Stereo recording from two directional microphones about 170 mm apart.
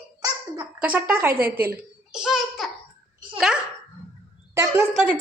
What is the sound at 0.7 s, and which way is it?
Speech, 10° right (ahead or behind).